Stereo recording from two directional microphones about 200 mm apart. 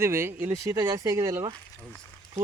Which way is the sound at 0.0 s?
10° right (ahead or behind).